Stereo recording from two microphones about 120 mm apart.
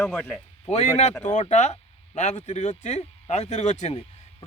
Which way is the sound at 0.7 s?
65° left (ahead or behind).